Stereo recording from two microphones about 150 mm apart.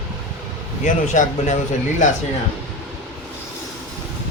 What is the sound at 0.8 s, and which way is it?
Speech, 55° left (ahead or behind).